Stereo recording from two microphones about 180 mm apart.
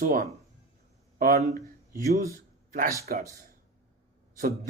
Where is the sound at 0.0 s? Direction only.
50° right (ahead or behind).